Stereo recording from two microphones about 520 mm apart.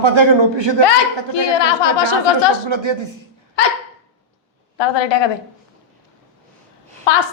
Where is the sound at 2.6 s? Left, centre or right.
Right.